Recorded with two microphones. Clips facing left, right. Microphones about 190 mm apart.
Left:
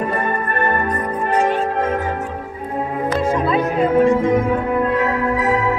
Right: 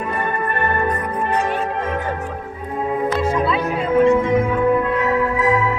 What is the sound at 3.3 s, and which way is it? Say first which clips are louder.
Music: left 1 dB; 45° left (ahead or behind).